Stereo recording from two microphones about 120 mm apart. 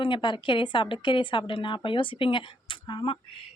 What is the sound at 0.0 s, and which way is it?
Speech, 40° left (ahead or behind).